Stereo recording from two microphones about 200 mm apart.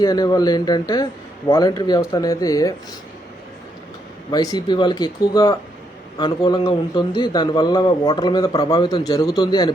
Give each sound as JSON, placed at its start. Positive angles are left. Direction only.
{"t": 0.0, "sound": "a man's voice", "side_deg": 20}
{"t": 4.7, "sound": "a man's voice", "side_deg": 20}